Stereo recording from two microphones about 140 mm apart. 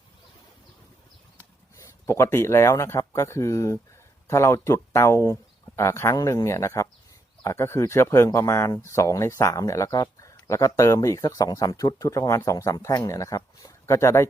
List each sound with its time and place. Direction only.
1.7 s speech: 20° left (ahead or behind)